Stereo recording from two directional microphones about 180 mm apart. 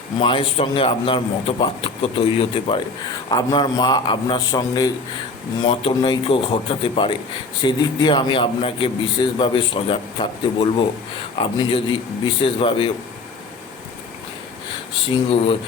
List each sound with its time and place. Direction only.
0.2 s a man's voice: 30° left (ahead or behind)
15.0 s speech: 30° left (ahead or behind)